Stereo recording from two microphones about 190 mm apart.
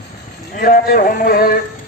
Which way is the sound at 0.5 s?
50° left (ahead or behind).